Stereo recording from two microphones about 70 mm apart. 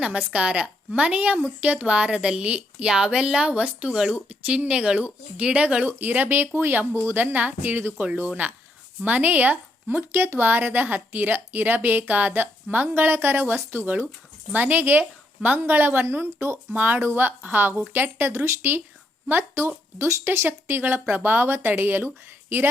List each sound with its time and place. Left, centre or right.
0.0 s a woman's voice: centre
5.8 s speech: right
16.7 s speech: right
18.3 s speech: right